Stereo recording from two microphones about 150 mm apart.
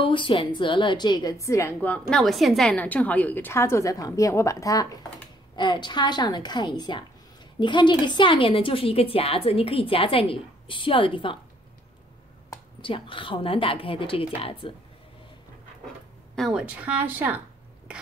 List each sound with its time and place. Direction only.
0.0 s a woman's voice: 35° left (ahead or behind)
12.8 s a woman's voice: 35° left (ahead or behind)
16.3 s speech: 5° right (ahead or behind)